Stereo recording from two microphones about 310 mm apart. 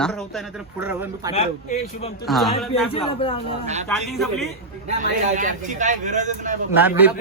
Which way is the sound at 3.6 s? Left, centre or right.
Right.